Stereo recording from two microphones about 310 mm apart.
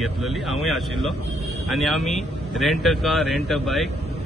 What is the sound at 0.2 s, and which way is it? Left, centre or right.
A man's voice, centre.